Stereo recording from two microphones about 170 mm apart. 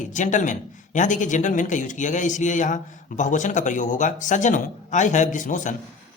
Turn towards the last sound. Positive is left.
turn(degrees=50)  # may be behind; listen again after turning